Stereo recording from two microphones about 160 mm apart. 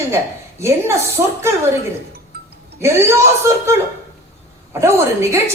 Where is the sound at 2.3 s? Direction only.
75° right (ahead or behind).